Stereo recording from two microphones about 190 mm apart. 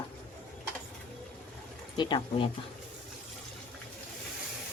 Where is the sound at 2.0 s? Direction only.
25° left (ahead or behind).